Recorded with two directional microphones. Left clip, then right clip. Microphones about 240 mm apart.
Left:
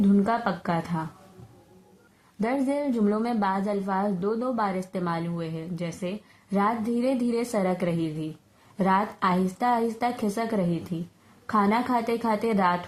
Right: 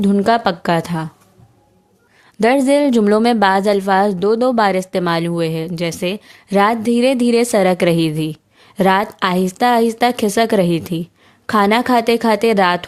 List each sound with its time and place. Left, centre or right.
0.0 s a woman's voice: right
2.4 s a woman's voice: right